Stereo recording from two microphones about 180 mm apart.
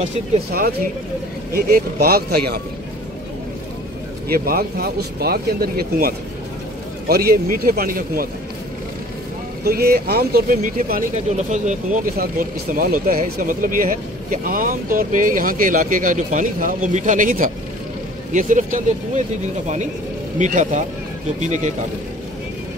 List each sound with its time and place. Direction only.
1.5 s speech: 55° right (ahead or behind)
4.3 s speech: 55° right (ahead or behind)
9.7 s speech: 60° right (ahead or behind)
20.3 s speech: 45° right (ahead or behind)